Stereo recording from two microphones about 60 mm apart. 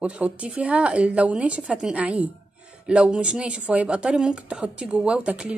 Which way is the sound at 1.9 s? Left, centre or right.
Right.